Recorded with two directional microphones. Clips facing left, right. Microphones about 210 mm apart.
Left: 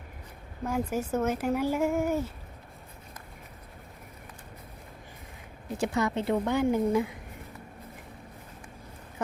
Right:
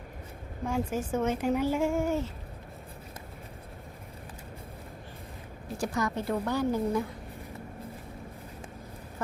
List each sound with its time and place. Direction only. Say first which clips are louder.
0.6 s speech: left 1 dB; 10° left (ahead or behind)
5.8 s a woman's voice: left 3 dB; 25° left (ahead or behind)